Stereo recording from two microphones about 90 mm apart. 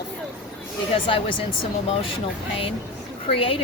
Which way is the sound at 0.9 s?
75° left (ahead or behind).